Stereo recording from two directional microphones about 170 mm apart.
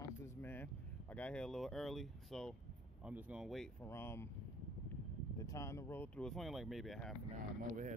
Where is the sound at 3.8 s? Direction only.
15° left (ahead or behind).